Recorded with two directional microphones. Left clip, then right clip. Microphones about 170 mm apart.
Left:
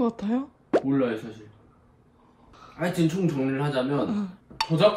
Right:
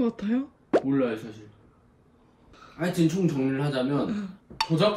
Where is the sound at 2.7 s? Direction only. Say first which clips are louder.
Even; 5° left (ahead or behind).